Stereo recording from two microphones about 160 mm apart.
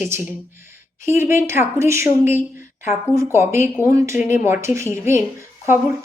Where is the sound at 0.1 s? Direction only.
10° right (ahead or behind).